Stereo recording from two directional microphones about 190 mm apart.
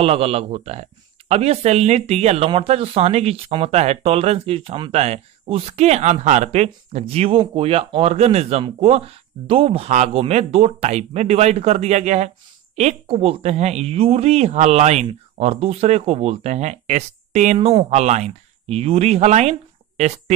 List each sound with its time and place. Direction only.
0.0 s speech: 30° right (ahead or behind)